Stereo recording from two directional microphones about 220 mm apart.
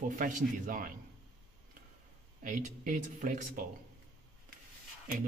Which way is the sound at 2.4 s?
35° right (ahead or behind).